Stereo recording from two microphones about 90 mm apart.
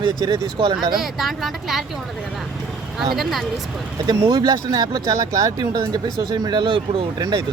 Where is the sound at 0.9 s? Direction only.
5° right (ahead or behind).